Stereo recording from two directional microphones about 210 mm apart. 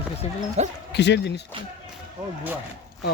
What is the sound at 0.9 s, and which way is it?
Speech, 55° left (ahead or behind).